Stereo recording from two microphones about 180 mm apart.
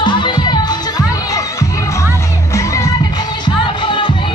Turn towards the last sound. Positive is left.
turn(degrees=25)  # may be behind; listen again after turning